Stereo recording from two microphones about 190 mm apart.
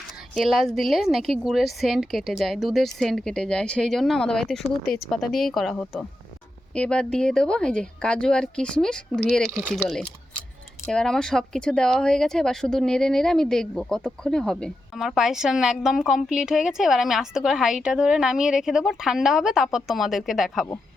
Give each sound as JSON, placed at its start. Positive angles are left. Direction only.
{"t": 0.3, "sound": "speech", "side_deg": 0}
{"t": 9.5, "sound": "speech", "side_deg": -10}
{"t": 9.7, "sound": "speech", "side_deg": 5}